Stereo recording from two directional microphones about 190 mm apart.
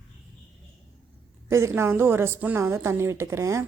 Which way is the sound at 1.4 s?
15° right (ahead or behind).